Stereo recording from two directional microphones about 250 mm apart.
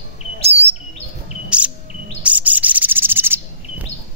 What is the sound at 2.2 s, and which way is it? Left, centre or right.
Insect, centre.